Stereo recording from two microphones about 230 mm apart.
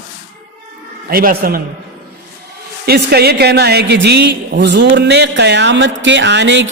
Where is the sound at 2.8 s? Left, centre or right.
Right.